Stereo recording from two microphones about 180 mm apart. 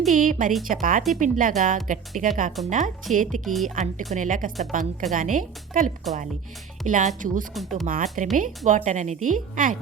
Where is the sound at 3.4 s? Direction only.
Centre (ahead or behind).